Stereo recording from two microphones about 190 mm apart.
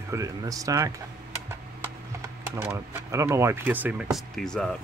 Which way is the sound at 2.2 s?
15° right (ahead or behind).